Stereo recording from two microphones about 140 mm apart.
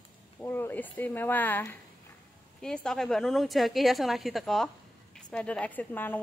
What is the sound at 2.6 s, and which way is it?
A woman's voice, 5° left (ahead or behind).